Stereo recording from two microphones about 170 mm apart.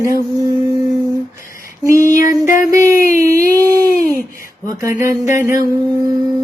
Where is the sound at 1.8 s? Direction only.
15° right (ahead or behind).